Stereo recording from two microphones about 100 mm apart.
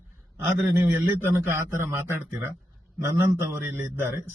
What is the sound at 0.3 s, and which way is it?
A man's voice, 20° right (ahead or behind).